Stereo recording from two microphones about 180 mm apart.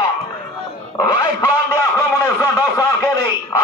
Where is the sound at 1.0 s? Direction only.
20° left (ahead or behind).